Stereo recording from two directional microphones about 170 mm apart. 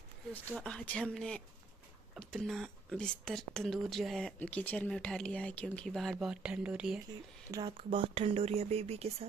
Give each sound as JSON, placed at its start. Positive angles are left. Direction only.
{"t": 0.3, "sound": "speech", "side_deg": 10}
{"t": 7.5, "sound": "speech", "side_deg": -30}